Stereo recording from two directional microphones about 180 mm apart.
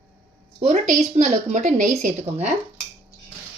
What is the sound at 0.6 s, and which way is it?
A woman's voice, 40° right (ahead or behind).